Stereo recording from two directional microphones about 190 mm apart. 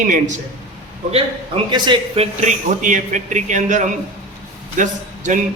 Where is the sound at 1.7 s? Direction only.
25° right (ahead or behind).